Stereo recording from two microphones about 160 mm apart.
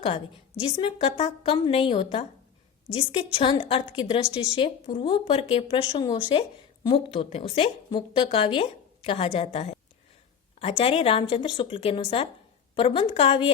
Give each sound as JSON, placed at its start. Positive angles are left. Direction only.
{"t": 0.6, "sound": "a woman's voice", "side_deg": 35}